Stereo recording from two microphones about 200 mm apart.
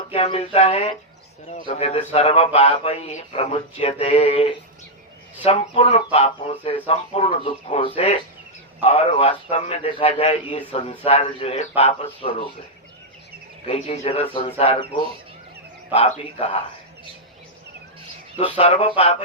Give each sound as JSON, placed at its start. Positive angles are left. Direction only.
{"t": 0.1, "sound": "speech", "side_deg": 30}
{"t": 13.7, "sound": "speech", "side_deg": 30}
{"t": 18.3, "sound": "speech", "side_deg": 25}